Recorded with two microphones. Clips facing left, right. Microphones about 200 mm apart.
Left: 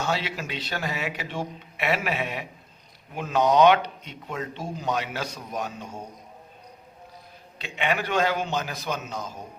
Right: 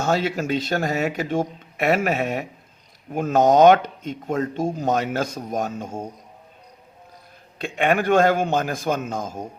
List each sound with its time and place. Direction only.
0.0 s speech: 45° right (ahead or behind)
7.6 s speech: 50° right (ahead or behind)